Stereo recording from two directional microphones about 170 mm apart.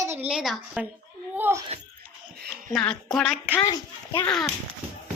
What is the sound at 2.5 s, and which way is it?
Speech, centre (ahead or behind).